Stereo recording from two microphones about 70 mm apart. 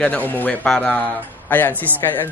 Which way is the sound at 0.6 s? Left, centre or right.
Centre.